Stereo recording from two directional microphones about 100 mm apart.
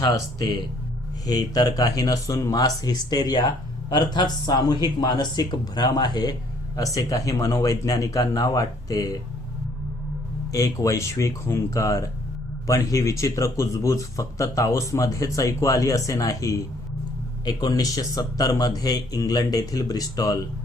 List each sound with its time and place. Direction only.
1.3 s a man's voice: 40° left (ahead or behind)
10.5 s a man's voice: 30° left (ahead or behind)